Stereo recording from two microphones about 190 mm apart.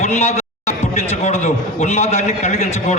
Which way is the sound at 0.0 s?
35° left (ahead or behind).